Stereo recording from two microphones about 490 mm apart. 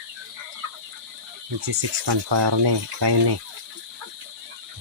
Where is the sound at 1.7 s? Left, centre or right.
Right.